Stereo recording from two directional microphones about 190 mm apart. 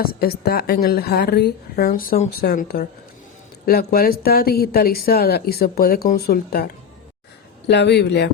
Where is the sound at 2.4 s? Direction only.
55° left (ahead or behind).